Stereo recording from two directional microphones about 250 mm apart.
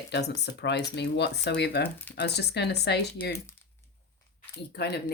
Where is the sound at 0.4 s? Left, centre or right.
Left.